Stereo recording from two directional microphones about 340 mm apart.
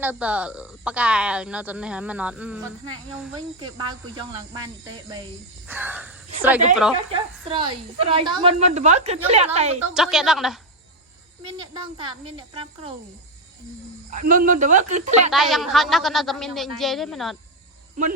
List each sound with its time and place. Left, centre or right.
0.0 s speech: centre
3.6 s a woman's voice: centre
9.9 s speech: centre
11.5 s a woman's voice: centre
14.1 s speech: right
15.3 s speech: centre